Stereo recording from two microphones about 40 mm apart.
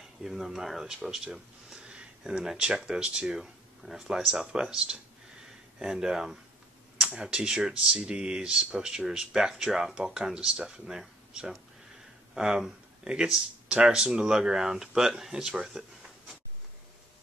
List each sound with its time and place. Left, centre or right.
0.0 s speech: centre
1.8 s a sound: centre
2.5 s speech: centre
10.3 s speech: right
10.9 s speech: centre
13.0 s speech: right